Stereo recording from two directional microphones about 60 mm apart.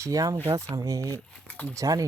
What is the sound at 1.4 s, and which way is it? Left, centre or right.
Speech, left.